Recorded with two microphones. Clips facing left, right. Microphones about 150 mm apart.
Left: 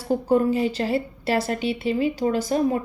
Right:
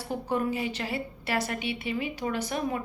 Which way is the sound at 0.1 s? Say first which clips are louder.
Left 9 dB; 35° left (ahead or behind).